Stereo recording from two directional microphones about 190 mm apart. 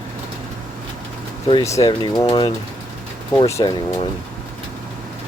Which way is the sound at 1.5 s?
20° left (ahead or behind).